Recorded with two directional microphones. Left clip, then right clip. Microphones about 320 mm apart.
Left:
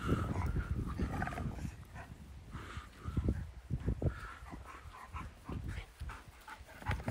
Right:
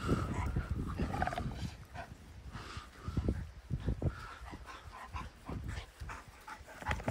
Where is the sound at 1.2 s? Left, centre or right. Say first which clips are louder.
Right 4 dB; centre.